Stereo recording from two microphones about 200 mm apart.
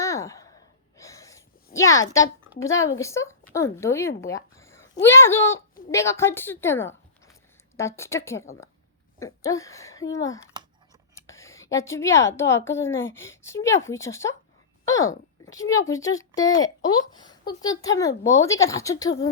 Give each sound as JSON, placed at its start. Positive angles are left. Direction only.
{"t": 0.0, "sound": "sigh", "side_deg": 15}
{"t": 2.6, "sound": "speech", "side_deg": 15}
{"t": 4.2, "sound": "a sound", "side_deg": 15}
{"t": 5.0, "sound": "a woman's voice", "side_deg": 10}